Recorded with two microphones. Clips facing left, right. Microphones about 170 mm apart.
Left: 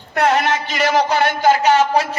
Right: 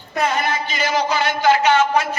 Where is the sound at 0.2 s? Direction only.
70° left (ahead or behind).